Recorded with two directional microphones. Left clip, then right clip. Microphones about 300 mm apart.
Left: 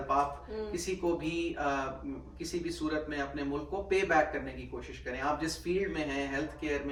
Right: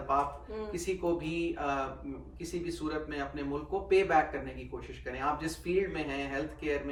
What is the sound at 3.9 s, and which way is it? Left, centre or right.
Mantra, centre.